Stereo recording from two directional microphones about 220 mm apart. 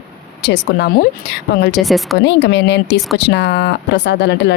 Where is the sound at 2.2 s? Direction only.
50° left (ahead or behind).